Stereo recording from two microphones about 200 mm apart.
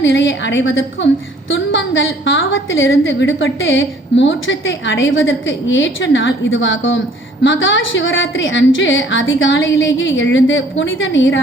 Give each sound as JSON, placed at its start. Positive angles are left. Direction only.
{"t": 0.0, "sound": "a woman's voice", "side_deg": 65}